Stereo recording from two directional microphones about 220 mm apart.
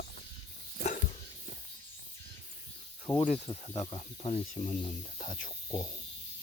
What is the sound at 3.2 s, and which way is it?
Speech, 25° left (ahead or behind).